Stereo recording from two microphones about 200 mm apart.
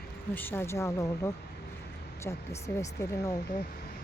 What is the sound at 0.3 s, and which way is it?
Speech, 10° left (ahead or behind).